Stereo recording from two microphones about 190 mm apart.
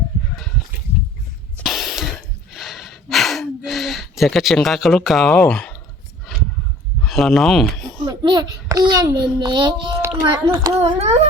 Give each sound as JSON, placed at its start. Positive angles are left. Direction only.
{"t": 1.5, "sound": "music", "side_deg": 0}
{"t": 2.5, "sound": "gasp", "side_deg": 0}
{"t": 7.0, "sound": "speech", "side_deg": 0}
{"t": 8.0, "sound": "a child's voice", "side_deg": -20}
{"t": 10.0, "sound": "a sound", "side_deg": -15}
{"t": 10.5, "sound": "a child's voice", "side_deg": -20}
{"t": 10.8, "sound": "a child's voice", "side_deg": -35}